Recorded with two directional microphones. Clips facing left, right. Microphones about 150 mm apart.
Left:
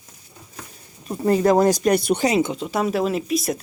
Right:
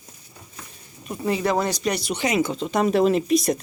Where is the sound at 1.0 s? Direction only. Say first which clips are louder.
Left 6 dB; 45° left (ahead or behind).